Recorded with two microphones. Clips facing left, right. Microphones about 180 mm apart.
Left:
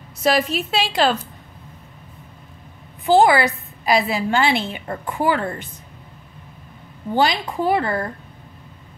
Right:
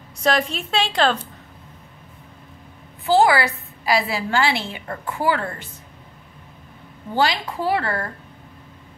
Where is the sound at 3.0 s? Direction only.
20° left (ahead or behind).